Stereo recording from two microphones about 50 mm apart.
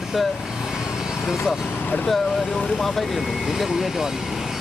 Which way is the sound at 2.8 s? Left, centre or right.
Centre.